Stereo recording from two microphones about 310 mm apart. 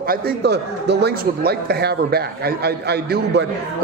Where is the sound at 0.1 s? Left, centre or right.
Right.